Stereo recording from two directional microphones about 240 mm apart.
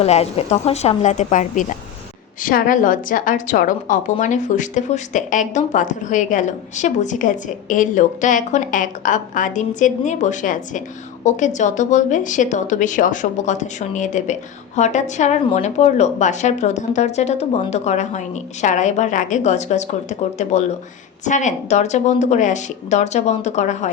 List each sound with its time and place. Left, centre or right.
0.0 s a woman's voice: left